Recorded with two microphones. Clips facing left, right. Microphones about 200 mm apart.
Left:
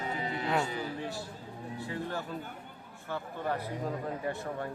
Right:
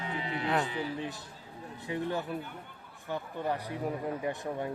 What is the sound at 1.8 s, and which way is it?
Speech, 20° right (ahead or behind).